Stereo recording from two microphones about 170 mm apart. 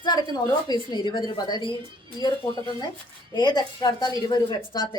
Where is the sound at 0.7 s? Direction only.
25° left (ahead or behind).